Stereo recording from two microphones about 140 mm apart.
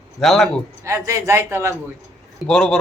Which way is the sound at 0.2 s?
Centre (ahead or behind).